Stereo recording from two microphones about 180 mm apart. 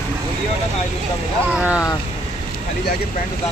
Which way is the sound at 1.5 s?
5° right (ahead or behind).